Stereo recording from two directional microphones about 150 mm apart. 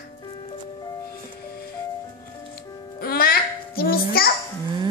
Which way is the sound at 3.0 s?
90° left.